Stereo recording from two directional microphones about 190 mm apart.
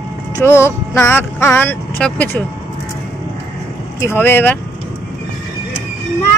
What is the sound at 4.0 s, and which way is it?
Speech, 10° left (ahead or behind).